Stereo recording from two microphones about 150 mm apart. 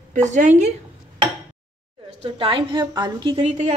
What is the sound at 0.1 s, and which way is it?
Music, 55° right (ahead or behind).